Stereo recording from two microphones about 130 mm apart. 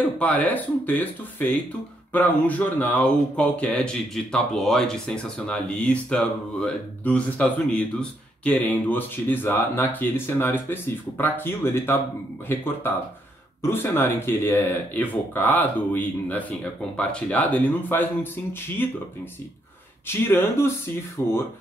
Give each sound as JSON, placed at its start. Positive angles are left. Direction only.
{"t": 0.2, "sound": "speech", "side_deg": 10}
{"t": 13.6, "sound": "speech", "side_deg": 20}
{"t": 20.1, "sound": "speech", "side_deg": 20}